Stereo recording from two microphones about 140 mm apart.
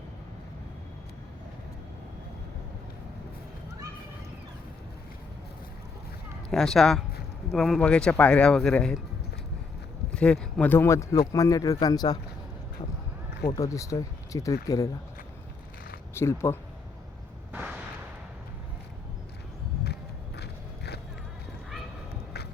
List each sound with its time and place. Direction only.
6.5 s speech: 5° left (ahead or behind)
10.2 s speech: 10° left (ahead or behind); by 12.2 s 30° left (ahead or behind)
13.6 s speech: 25° left (ahead or behind)
16.1 s speech: 20° left (ahead or behind)
17.5 s artillery fire: 10° right (ahead or behind)